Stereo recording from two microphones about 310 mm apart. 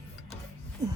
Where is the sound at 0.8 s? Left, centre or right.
Centre.